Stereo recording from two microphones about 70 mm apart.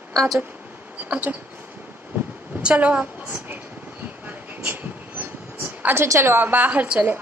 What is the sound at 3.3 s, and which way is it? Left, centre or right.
Train, right.